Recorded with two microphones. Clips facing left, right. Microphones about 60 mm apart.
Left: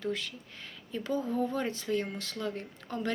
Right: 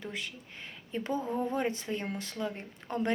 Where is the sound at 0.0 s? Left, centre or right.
Right.